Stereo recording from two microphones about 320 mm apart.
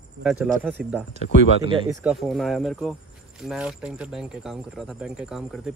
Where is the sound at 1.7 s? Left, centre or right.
Centre.